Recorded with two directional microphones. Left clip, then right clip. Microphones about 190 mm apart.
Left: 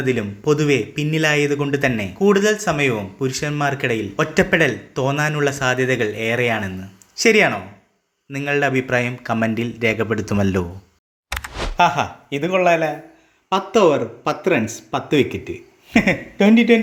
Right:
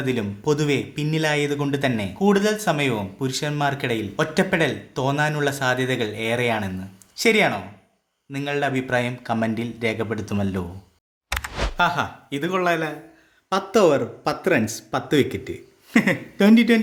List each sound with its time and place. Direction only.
0.0 s a man's voice: 5° left (ahead or behind)
11.3 s a sound: centre (ahead or behind)
12.3 s a man's voice: centre (ahead or behind)